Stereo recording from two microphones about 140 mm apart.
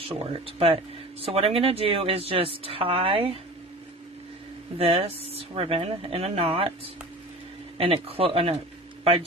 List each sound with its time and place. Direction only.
0.1 s a woman's voice: 45° right (ahead or behind)
4.7 s a woman's voice: 45° right (ahead or behind)
7.7 s a woman's voice: 45° right (ahead or behind)